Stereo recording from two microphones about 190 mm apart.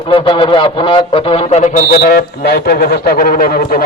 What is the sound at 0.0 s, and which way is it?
A man's voice, 25° left (ahead or behind).